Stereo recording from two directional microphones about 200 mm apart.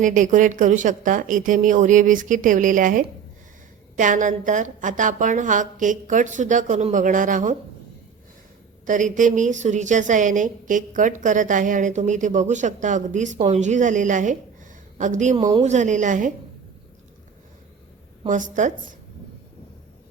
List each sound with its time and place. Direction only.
0.0 s a woman's voice: 40° right (ahead or behind)
8.9 s a woman's voice: 40° right (ahead or behind)
18.3 s a woman's voice: 40° right (ahead or behind)